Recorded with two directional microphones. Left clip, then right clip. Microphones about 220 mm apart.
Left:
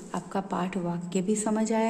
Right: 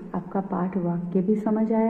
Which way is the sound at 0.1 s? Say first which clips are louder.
Right 2 dB; 20° left (ahead or behind).